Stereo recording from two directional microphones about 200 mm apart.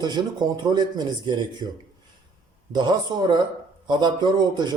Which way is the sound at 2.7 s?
20° right (ahead or behind).